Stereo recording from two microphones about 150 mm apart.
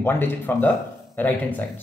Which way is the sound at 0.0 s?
15° left (ahead or behind).